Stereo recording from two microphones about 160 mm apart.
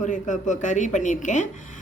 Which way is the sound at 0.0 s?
50° left (ahead or behind).